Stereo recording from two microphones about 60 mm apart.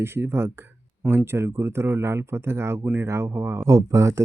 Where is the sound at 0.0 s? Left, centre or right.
Right.